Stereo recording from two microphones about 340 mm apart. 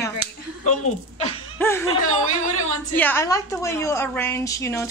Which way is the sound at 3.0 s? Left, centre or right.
Centre.